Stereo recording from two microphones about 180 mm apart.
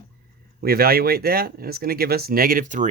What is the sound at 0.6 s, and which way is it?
Speech, 60° right (ahead or behind).